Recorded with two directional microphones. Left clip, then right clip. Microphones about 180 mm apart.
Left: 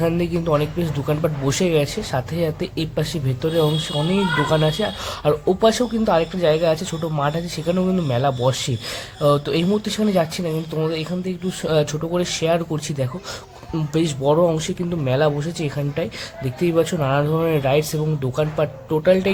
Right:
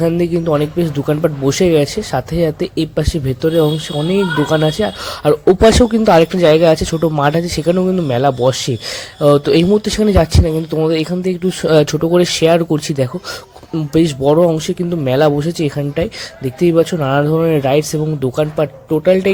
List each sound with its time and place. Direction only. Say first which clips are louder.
0.0 s speech: right 6 dB; 25° right (ahead or behind)